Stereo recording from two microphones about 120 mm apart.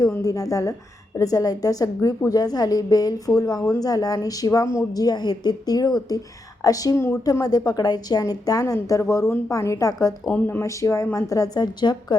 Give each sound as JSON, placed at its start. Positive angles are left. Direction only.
{"t": 0.2, "sound": "a woman's voice", "side_deg": 30}
{"t": 7.4, "sound": "a woman's voice", "side_deg": 35}
{"t": 10.2, "sound": "a woman's voice", "side_deg": 15}